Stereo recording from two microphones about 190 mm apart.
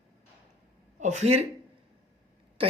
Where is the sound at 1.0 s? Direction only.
40° right (ahead or behind).